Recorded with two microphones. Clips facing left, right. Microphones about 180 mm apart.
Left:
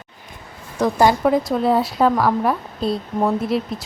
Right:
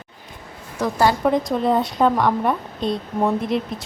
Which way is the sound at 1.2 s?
Centre (ahead or behind).